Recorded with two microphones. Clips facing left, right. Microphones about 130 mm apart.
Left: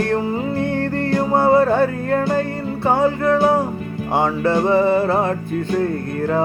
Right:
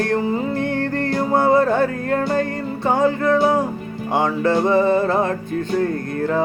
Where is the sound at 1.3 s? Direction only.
35° left (ahead or behind).